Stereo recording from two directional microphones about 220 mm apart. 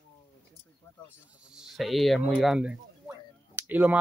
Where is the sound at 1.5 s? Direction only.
Centre (ahead or behind).